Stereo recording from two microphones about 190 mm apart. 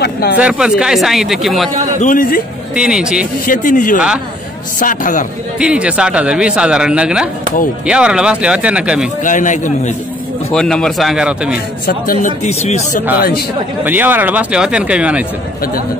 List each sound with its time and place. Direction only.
0.0 s speech: 60° left (ahead or behind)
0.4 s a man's voice: 5° right (ahead or behind)
2.0 s speech: 45° left (ahead or behind)
2.7 s a man's voice: 5° right (ahead or behind)
3.4 s speech: 45° left (ahead or behind)
5.6 s a man's voice: 5° right (ahead or behind)
9.2 s a man's voice: 40° left (ahead or behind)
10.5 s a man's voice: 5° left (ahead or behind)
11.8 s speech: 50° left (ahead or behind)
12.4 s a man's voice: 35° left (ahead or behind)
13.8 s speech: 10° right (ahead or behind)